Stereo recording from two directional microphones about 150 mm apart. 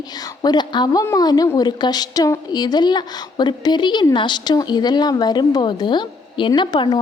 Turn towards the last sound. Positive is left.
turn(degrees=30)  # may be behind; listen again after turning